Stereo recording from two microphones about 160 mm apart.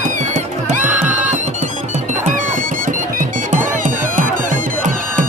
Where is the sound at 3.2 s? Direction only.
50° right (ahead or behind).